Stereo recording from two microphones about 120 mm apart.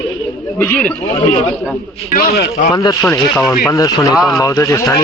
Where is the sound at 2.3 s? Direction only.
90° left.